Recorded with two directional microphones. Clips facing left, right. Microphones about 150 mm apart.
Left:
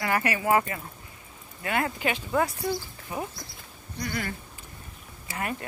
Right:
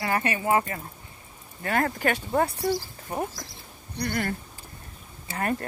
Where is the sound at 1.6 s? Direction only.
40° right (ahead or behind).